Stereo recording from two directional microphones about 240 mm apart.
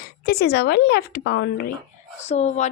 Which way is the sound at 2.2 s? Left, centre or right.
Left.